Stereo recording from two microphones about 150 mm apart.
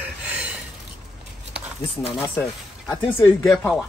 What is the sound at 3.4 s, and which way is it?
Speech, centre (ahead or behind).